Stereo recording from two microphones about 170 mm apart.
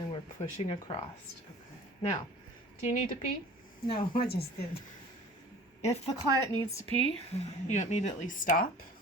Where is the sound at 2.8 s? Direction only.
45° left (ahead or behind).